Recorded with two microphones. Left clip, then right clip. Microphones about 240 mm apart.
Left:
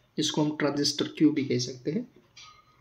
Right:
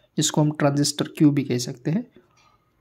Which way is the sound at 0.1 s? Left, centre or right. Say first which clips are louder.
Right 5 dB; right.